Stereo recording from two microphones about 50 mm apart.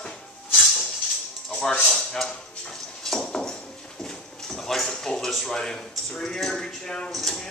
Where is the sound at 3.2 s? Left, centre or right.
Centre.